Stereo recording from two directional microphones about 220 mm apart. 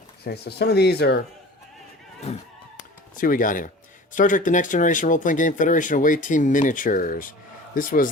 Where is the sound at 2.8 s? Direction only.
40° left (ahead or behind).